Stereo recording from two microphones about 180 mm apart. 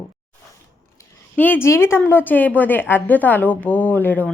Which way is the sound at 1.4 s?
10° left (ahead or behind).